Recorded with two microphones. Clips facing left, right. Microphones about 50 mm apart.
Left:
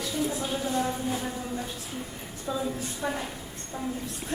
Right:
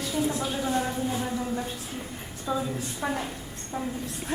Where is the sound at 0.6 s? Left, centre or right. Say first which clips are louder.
Right 1 dB; right.